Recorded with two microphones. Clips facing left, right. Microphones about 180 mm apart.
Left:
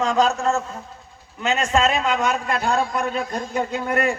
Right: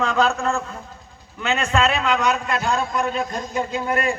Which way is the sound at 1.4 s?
45° left (ahead or behind).